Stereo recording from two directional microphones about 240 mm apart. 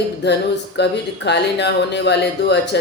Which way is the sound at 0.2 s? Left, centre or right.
Left.